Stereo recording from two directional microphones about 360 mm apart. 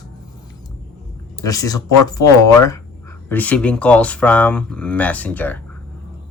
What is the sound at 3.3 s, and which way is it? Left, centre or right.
Speech, centre.